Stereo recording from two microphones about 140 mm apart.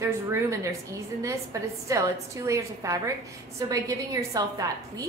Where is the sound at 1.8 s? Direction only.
20° right (ahead or behind).